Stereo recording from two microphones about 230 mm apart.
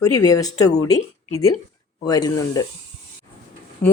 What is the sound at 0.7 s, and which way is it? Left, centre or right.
Speech, left.